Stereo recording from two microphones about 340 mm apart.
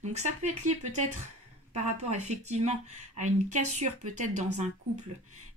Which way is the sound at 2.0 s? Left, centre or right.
Centre.